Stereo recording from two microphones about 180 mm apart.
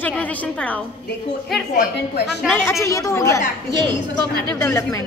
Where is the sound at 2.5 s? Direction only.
15° left (ahead or behind).